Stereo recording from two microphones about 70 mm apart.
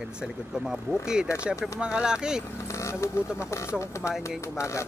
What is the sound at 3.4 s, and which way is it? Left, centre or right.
Speech, left.